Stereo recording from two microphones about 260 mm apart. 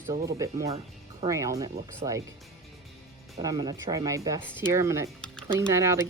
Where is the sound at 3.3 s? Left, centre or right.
Centre.